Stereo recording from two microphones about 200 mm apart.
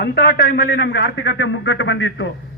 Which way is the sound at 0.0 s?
55° left (ahead or behind).